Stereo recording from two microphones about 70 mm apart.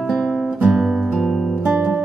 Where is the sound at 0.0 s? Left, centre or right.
Centre.